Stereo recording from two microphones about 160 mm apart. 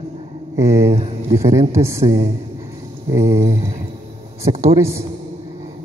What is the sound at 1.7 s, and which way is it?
Speech, 15° right (ahead or behind).